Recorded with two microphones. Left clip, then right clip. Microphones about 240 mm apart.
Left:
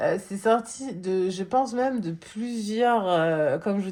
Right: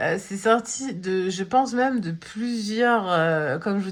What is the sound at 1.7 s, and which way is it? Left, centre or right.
A woman's voice, right.